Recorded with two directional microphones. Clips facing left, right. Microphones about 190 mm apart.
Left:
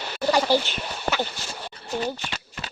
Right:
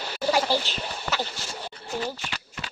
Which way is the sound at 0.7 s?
55° left (ahead or behind).